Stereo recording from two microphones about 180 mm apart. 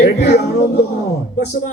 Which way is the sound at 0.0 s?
65° left (ahead or behind).